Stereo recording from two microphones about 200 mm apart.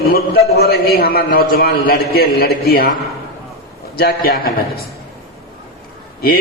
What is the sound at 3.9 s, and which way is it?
Speech, 50° left (ahead or behind).